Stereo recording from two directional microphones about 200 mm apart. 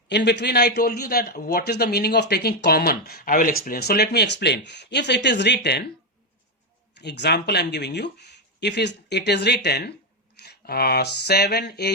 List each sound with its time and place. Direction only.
0.1 s a man's voice: 60° left (ahead or behind)
7.0 s speech: 55° left (ahead or behind)
10.3 s a sound: 55° left (ahead or behind)